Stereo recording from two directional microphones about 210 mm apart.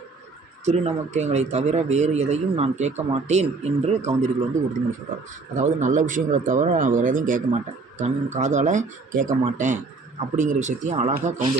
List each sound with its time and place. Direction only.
0.6 s speech: 35° right (ahead or behind)
5.5 s speech: 35° right (ahead or behind)